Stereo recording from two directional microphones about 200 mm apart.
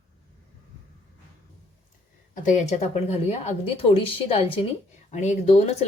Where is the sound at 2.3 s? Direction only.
40° left (ahead or behind).